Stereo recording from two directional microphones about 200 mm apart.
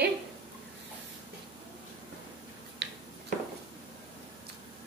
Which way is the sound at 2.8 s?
55° right (ahead or behind).